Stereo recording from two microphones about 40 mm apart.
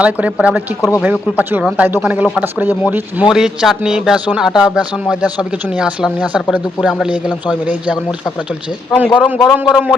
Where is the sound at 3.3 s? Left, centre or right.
Centre.